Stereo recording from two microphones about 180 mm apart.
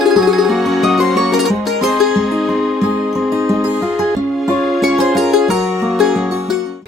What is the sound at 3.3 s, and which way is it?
Music, 15° right (ahead or behind).